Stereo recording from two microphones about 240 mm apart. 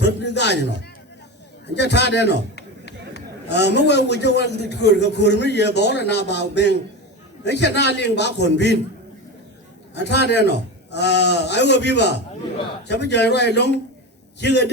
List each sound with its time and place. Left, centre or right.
0.0 s a man's voice: left
9.9 s a man's voice: left